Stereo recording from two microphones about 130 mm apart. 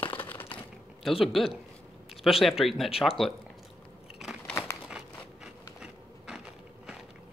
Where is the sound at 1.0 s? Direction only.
Centre (ahead or behind).